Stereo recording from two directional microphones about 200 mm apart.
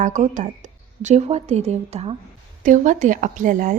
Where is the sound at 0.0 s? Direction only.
40° right (ahead or behind).